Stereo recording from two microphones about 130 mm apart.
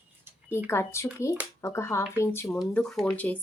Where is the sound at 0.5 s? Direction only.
20° left (ahead or behind).